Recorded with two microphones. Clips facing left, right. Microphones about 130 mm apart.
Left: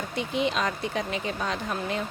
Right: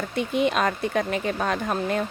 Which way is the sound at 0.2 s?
55° right (ahead or behind).